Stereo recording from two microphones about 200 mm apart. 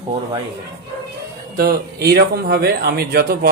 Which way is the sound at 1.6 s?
50° right (ahead or behind).